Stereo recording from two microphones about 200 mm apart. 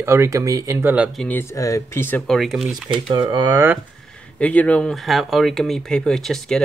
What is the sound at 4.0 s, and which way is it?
Speech, 5° left (ahead or behind).